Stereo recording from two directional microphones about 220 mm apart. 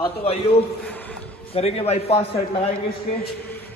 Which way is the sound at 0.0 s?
25° left (ahead or behind).